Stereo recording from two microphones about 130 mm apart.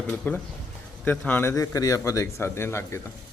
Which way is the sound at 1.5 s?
25° left (ahead or behind).